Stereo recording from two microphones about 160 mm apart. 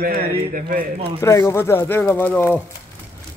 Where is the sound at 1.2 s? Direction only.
15° left (ahead or behind).